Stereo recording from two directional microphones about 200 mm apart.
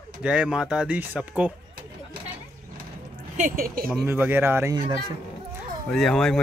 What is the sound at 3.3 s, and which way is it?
Speech, 40° right (ahead or behind).